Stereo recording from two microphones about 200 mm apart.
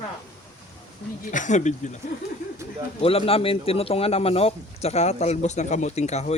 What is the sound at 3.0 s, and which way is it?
A man's voice, 30° left (ahead or behind).